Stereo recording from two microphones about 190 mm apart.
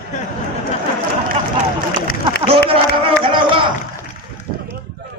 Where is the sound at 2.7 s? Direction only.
30° right (ahead or behind).